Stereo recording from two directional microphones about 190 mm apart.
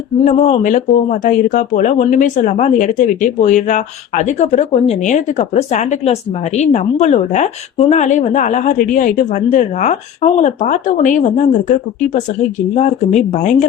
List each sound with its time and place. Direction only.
0.3 s speech: 35° left (ahead or behind)
12.7 s speech: 35° left (ahead or behind)